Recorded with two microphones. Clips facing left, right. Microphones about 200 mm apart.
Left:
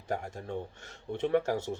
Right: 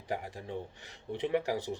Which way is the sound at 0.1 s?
45° left (ahead or behind).